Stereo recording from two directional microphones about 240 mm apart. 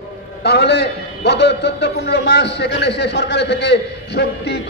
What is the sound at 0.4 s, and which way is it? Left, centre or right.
A man's voice, left.